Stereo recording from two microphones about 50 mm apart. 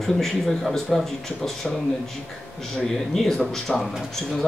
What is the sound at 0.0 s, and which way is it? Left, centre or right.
Speech, centre.